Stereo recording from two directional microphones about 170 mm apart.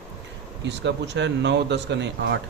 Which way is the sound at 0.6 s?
90° right.